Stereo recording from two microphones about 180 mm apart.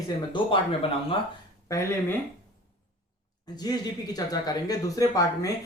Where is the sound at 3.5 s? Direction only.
20° left (ahead or behind).